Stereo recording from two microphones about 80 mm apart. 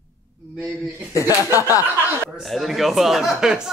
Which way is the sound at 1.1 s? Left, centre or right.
Left.